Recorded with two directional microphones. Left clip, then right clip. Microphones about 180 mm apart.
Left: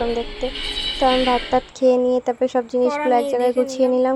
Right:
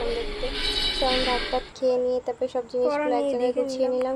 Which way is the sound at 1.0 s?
40° left (ahead or behind).